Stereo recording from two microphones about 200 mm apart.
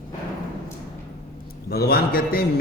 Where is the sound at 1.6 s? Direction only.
50° left (ahead or behind).